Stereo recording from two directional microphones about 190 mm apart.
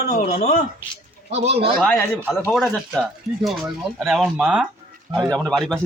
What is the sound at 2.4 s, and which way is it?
A man's voice, centre (ahead or behind).